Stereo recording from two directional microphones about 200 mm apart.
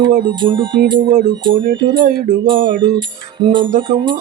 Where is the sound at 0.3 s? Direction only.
25° right (ahead or behind).